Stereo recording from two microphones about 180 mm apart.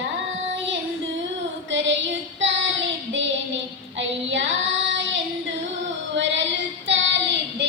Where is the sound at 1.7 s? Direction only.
85° right.